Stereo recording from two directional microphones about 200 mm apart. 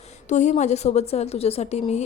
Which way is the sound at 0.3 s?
35° left (ahead or behind).